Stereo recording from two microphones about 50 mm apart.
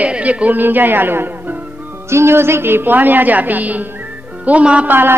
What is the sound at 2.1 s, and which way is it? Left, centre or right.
A man's voice, right.